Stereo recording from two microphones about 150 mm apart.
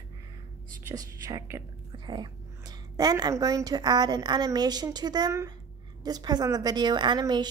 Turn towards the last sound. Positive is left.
turn(degrees=-30)  # may be behind; listen again after turning